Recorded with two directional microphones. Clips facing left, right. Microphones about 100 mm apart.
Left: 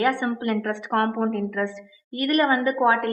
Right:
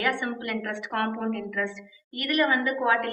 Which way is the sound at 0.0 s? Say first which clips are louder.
Left 5 dB; 30° left (ahead or behind).